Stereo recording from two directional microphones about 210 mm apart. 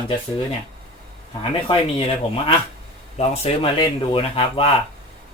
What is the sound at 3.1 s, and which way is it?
Speech, 30° left (ahead or behind).